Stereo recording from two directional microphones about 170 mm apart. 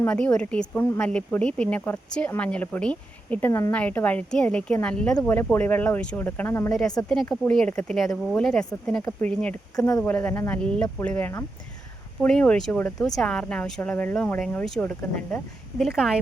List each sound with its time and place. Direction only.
0.0 s a woman's voice: 5° left (ahead or behind)
9.7 s speech: 20° left (ahead or behind)
10.0 s a woman's voice: 10° left (ahead or behind)
16.0 s speech: 5° right (ahead or behind)